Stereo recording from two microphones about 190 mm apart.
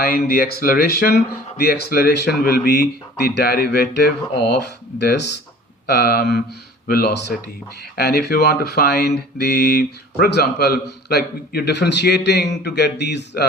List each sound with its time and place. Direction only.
0.3 s speech: 50° left (ahead or behind)